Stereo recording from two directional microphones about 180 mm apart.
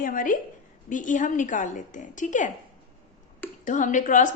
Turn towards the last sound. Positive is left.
turn(degrees=45)  # may be behind; listen again after turning